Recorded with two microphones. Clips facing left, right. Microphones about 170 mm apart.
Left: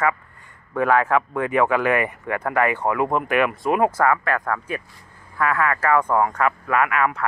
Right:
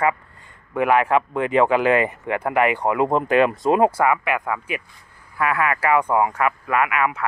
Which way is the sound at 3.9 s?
15° right (ahead or behind).